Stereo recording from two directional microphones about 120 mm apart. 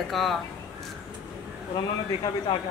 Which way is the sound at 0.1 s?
Centre (ahead or behind).